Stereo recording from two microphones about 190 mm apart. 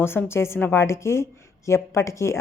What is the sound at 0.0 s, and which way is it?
A woman's voice, 10° left (ahead or behind).